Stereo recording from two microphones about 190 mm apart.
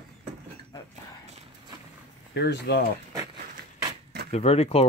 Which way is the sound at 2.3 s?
60° left (ahead or behind).